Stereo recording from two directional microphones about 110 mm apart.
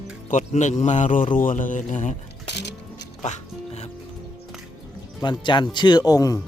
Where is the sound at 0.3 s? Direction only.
90° left.